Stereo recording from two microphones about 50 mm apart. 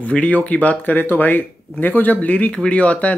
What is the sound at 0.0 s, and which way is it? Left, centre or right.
Speech, left.